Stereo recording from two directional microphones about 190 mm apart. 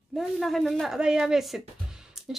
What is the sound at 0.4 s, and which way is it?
Speech, centre (ahead or behind).